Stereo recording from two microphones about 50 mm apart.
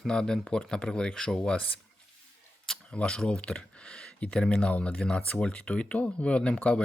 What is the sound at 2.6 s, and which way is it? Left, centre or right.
Camera, centre.